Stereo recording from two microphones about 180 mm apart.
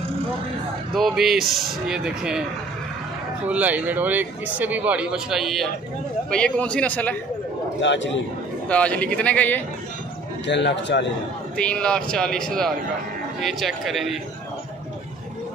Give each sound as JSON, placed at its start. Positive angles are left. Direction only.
{"t": 0.9, "sound": "speech", "side_deg": 0}
{"t": 3.4, "sound": "a man's voice", "side_deg": -10}
{"t": 7.8, "sound": "a man's voice", "side_deg": 90}
{"t": 8.6, "sound": "a man's voice", "side_deg": 5}
{"t": 10.4, "sound": "speech", "side_deg": 75}
{"t": 11.5, "sound": "speech", "side_deg": 5}